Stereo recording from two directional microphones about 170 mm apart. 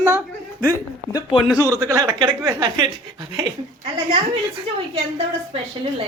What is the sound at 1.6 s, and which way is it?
Speech, 20° right (ahead or behind).